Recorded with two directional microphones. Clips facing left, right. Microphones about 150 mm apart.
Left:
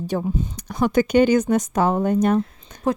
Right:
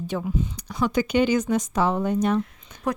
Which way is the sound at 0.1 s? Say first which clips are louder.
Left 3 dB; 45° left (ahead or behind).